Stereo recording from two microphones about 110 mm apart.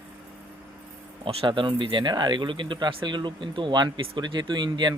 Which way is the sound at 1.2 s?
50° right (ahead or behind).